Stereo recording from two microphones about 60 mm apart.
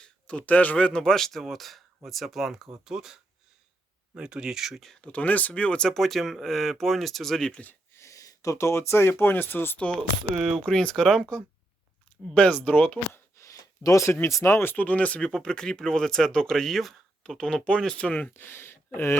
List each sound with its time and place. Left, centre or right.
0.0 s speech: centre
4.8 s speech: centre
5.0 s speech: left
5.9 s speech: centre
7.9 s speech: left
9.7 s speech: centre
10.3 s speech: centre; by 13.0 s left
13.4 s a sound: left
14.3 s speech: left
14.6 s speech: left
15.3 s speech: centre
18.3 s speech: left